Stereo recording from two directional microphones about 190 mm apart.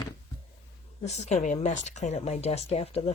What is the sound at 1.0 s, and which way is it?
Speech, 35° left (ahead or behind).